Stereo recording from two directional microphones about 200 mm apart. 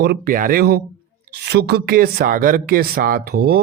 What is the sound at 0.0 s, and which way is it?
A man's voice, 50° right (ahead or behind).